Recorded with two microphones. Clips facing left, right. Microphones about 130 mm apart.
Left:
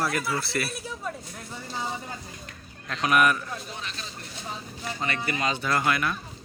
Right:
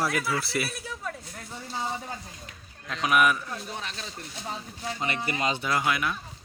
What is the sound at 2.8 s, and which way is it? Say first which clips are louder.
Speech: left 1 dB; 5° right (ahead or behind).